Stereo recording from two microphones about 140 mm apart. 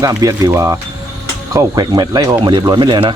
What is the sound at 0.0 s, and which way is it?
A man's voice, 25° right (ahead or behind).